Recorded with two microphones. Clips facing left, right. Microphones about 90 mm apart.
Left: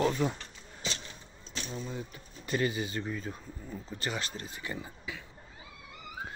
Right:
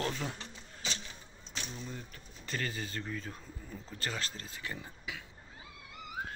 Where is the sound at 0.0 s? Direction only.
10° left (ahead or behind).